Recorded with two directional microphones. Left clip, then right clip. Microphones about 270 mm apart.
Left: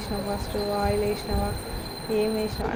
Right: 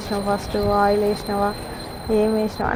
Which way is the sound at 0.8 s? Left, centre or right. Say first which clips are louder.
Right 8 dB; centre.